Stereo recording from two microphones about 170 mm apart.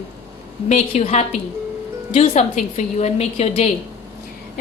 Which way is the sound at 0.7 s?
40° left (ahead or behind).